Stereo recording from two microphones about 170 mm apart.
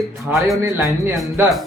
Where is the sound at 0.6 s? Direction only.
15° right (ahead or behind).